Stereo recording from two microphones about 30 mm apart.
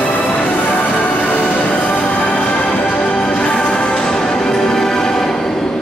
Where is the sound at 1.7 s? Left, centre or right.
Left.